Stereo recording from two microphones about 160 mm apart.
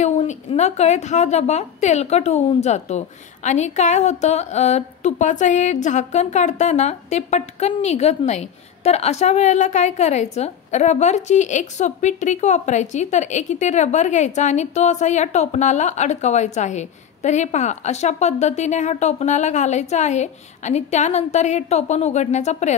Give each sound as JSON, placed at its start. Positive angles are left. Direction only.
{"t": 0.0, "sound": "a woman's voice", "side_deg": 45}